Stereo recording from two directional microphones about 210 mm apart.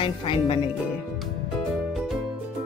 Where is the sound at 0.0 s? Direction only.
25° left (ahead or behind).